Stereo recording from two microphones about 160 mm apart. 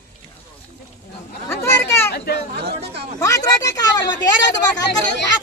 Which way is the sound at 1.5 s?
15° left (ahead or behind).